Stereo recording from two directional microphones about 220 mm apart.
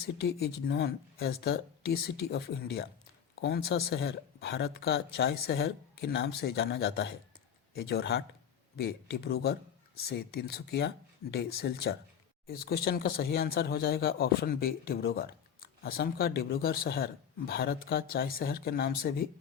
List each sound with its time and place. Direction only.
0.0 s speech: 45° left (ahead or behind)